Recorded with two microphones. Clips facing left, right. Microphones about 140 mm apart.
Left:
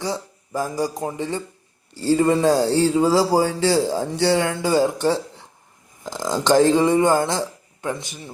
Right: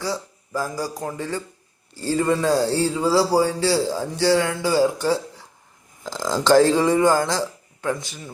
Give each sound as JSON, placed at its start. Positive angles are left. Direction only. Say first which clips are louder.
{"t": 0.0, "sound": "speech", "louder": "left 1 dB", "side_deg": 20}